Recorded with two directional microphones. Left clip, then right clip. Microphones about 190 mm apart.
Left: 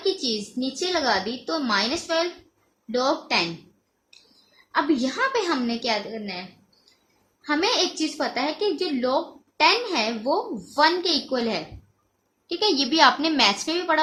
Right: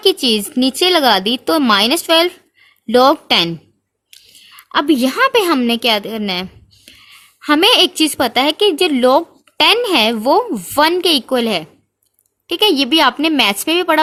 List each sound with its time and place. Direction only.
0.0 s speech: 40° right (ahead or behind)
4.7 s a woman's voice: 40° right (ahead or behind)
7.4 s a woman's voice: 45° right (ahead or behind)